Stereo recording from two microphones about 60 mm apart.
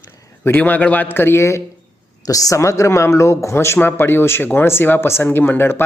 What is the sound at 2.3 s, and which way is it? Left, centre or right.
Speech, left.